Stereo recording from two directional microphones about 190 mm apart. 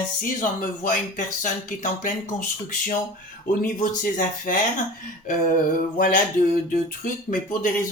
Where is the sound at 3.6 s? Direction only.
40° left (ahead or behind).